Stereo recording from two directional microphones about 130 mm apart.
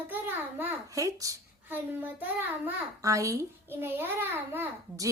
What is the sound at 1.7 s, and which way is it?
A child's voice, 15° right (ahead or behind).